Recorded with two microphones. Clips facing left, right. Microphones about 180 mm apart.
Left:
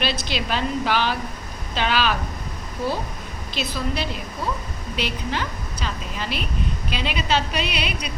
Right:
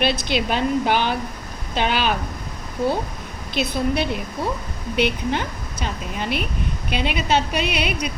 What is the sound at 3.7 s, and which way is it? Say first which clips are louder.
Speech: right 5 dB; 60° right (ahead or behind).